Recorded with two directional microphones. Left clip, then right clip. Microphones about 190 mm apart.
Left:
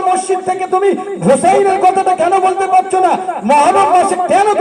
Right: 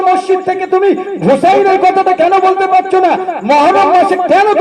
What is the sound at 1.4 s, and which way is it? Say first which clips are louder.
A man's voice: right 3 dB; 35° right (ahead or behind).